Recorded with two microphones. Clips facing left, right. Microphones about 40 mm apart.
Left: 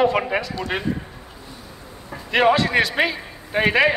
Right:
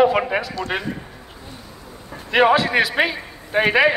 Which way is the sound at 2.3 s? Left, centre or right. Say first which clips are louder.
Right 1 dB; centre.